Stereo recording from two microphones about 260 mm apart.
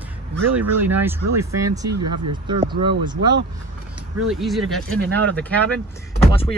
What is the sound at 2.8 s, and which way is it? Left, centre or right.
Speech, centre.